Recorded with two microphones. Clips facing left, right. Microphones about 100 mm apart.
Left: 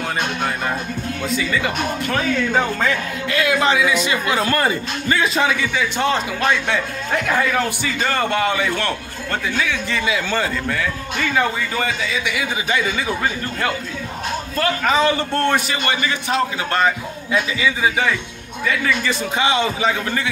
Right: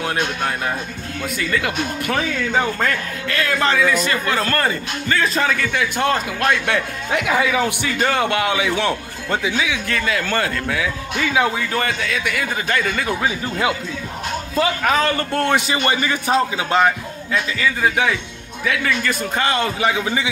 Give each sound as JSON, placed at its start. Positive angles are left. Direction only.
{"t": 1.3, "sound": "a man's voice", "side_deg": 0}
{"t": 3.3, "sound": "a man's voice", "side_deg": 15}
{"t": 5.2, "sound": "a man's voice", "side_deg": 5}
{"t": 9.9, "sound": "a man's voice", "side_deg": 5}
{"t": 14.5, "sound": "a man's voice", "side_deg": -10}
{"t": 15.0, "sound": "a man's voice", "side_deg": 0}
{"t": 15.7, "sound": "a man's voice", "side_deg": -30}
{"t": 17.3, "sound": "a man's voice", "side_deg": 10}